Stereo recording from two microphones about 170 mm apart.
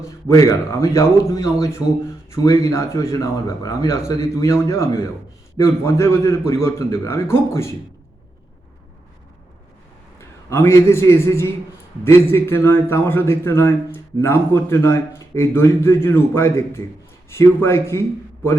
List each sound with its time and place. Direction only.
0.0 s a man's voice: 15° left (ahead or behind)
10.2 s a man's voice: 15° left (ahead or behind)